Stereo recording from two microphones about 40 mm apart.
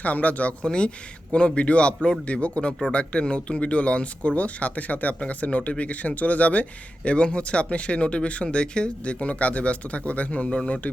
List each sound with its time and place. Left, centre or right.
0.0 s speech: left
0.6 s speech: left